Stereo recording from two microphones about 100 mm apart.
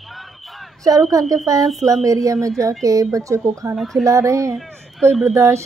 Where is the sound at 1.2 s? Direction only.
35° right (ahead or behind).